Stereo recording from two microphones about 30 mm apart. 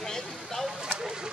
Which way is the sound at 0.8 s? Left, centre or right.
Right.